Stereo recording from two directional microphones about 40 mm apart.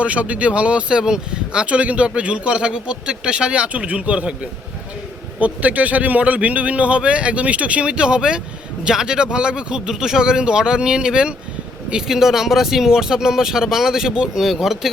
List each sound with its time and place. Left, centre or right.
0.0 s a man's voice: right
1.6 s a man's voice: right
5.4 s a man's voice: right
12.0 s speech: centre